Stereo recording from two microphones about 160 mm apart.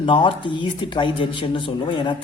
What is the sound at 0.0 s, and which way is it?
A man's voice, 30° left (ahead or behind).